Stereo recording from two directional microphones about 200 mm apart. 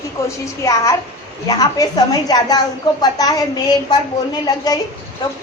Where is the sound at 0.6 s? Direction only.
15° left (ahead or behind).